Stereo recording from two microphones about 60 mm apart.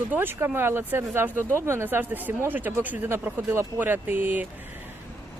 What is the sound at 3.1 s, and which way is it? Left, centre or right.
Speech, right.